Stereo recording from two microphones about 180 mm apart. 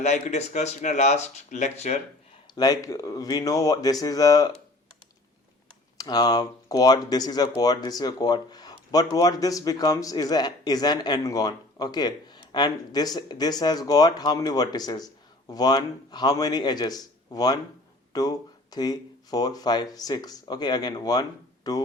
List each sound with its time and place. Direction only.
0.0 s speech: 40° left (ahead or behind)
2.6 s speech: 20° left (ahead or behind)
6.0 s speech: 20° left (ahead or behind)